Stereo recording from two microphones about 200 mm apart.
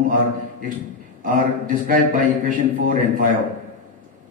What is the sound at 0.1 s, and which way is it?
A man's voice, 40° right (ahead or behind).